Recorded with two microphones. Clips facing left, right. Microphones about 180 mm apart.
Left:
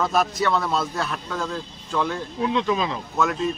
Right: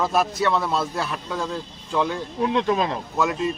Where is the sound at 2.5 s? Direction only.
55° right (ahead or behind).